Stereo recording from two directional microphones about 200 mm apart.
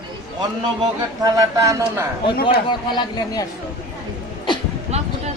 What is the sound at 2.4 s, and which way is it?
Speech, 25° left (ahead or behind).